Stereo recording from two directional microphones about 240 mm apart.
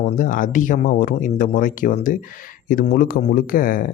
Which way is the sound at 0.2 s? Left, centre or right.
Left.